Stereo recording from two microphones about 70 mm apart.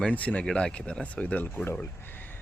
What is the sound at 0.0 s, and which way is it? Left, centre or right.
Speech, left.